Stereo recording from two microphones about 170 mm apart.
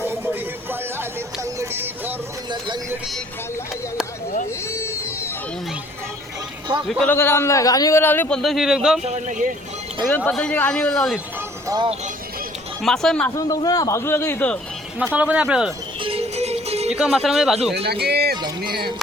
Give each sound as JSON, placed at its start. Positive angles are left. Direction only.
{"t": 1.5, "sound": "a sound", "side_deg": -10}
{"t": 4.7, "sound": "music", "side_deg": 15}
{"t": 7.0, "sound": "a man's voice", "side_deg": 10}
{"t": 9.0, "sound": "speech", "side_deg": -45}
{"t": 10.1, "sound": "a man's voice", "side_deg": 10}
{"t": 11.7, "sound": "speech", "side_deg": -20}
{"t": 12.8, "sound": "a man's voice", "side_deg": 5}
{"t": 13.3, "sound": "a man's voice", "side_deg": 20}
{"t": 15.1, "sound": "speech", "side_deg": -10}
{"t": 16.0, "sound": "music", "side_deg": -35}
{"t": 16.9, "sound": "a man's voice", "side_deg": -5}
{"t": 17.8, "sound": "speech", "side_deg": -70}